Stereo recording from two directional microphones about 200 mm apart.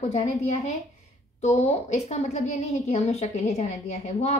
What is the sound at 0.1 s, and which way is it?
A woman's voice, 35° left (ahead or behind).